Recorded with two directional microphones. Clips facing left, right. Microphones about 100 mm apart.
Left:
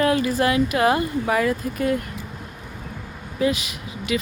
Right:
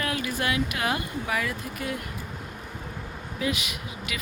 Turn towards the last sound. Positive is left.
turn(degrees=30)  # may be behind; listen again after turning